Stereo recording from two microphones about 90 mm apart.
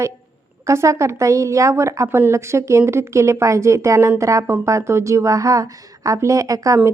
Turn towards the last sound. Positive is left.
turn(degrees=-40)  # may be behind; listen again after turning